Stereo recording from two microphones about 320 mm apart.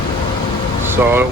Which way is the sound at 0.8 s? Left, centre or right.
Centre.